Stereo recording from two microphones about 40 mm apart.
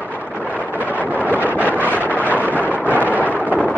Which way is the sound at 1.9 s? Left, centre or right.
Right.